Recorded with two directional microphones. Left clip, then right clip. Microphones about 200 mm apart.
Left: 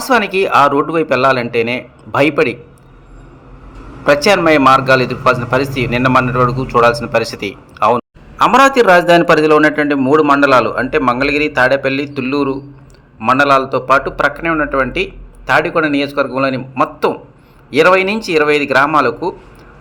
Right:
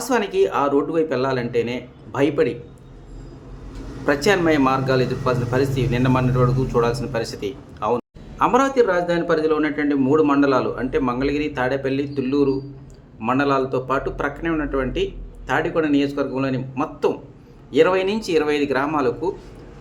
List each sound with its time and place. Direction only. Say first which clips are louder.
0.0 s a man's voice: left 6 dB; 15° left (ahead or behind)
4.0 s a man's voice: left 8 dB; 15° left (ahead or behind)